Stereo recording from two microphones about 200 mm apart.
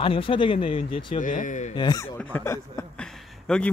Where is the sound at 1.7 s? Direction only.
20° left (ahead or behind).